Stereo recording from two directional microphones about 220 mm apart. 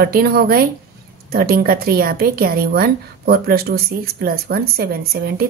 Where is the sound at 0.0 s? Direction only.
45° right (ahead or behind).